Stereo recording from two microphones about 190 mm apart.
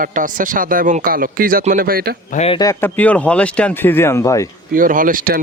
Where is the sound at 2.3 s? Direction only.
35° left (ahead or behind).